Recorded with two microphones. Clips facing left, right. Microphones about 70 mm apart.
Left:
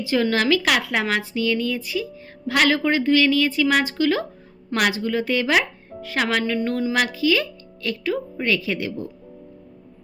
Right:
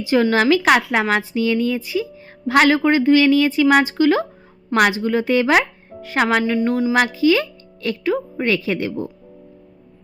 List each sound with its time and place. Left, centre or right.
0.0 s a woman's voice: right
6.4 s speech: centre
6.9 s speech: right